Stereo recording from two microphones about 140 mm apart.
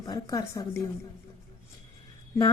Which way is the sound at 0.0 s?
25° left (ahead or behind).